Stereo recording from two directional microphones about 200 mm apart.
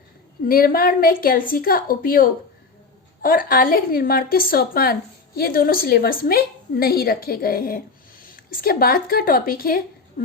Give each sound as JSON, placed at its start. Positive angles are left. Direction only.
{"t": 0.4, "sound": "a woman's voice", "side_deg": 45}